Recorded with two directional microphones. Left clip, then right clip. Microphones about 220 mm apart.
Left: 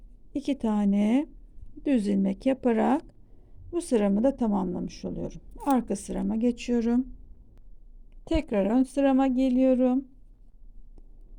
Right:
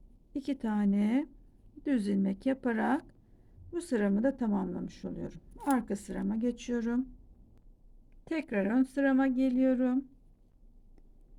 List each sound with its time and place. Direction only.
0.3 s speech: 20° left (ahead or behind)
8.2 s speech: 20° left (ahead or behind)